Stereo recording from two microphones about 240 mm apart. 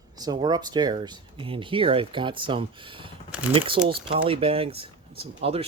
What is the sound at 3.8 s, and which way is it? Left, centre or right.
Speech, right.